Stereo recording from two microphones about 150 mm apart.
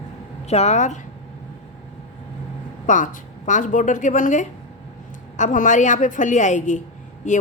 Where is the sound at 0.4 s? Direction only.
45° left (ahead or behind).